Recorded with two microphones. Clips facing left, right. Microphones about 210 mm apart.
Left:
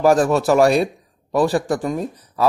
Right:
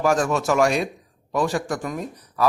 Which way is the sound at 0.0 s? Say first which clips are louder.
Left 6 dB; 35° left (ahead or behind).